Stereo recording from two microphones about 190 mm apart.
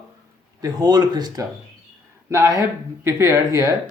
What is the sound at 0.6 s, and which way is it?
A man's voice, 20° right (ahead or behind).